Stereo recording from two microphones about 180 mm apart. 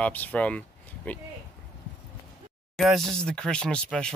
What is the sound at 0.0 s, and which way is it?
Speech, 10° left (ahead or behind).